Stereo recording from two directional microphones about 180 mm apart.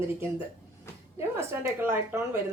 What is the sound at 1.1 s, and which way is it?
A woman's voice, 15° right (ahead or behind).